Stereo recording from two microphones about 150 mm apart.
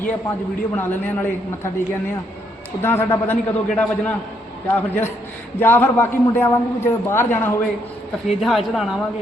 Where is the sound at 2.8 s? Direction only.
15° left (ahead or behind).